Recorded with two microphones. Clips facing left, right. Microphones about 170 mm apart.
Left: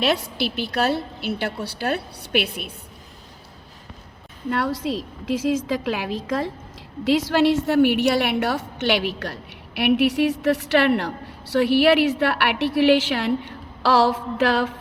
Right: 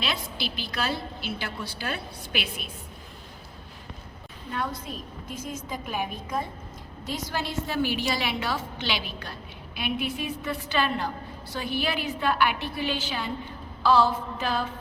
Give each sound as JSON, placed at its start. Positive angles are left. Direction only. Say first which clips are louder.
{"t": 0.5, "sound": "a woman's voice", "louder": "left 8 dB", "side_deg": 65}
{"t": 4.4, "sound": "a woman's voice", "louder": "left 9 dB", "side_deg": 85}